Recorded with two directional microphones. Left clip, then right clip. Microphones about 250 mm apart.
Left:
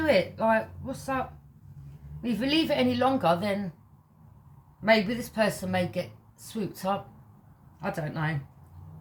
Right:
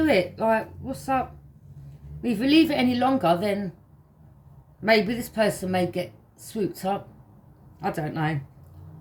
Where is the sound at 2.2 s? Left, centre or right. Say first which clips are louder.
Right 6 dB; centre.